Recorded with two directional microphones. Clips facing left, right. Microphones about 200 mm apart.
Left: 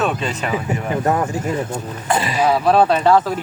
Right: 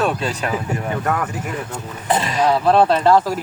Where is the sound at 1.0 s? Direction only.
25° left (ahead or behind).